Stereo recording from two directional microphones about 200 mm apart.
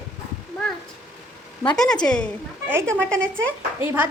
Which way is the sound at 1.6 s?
Centre (ahead or behind).